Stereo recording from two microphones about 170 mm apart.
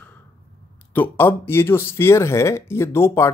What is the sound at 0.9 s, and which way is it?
Speech, 10° left (ahead or behind).